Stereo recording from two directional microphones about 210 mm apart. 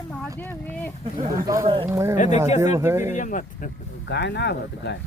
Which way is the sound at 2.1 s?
35° left (ahead or behind).